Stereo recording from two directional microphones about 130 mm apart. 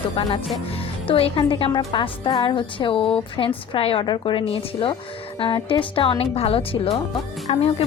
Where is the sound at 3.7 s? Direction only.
45° left (ahead or behind).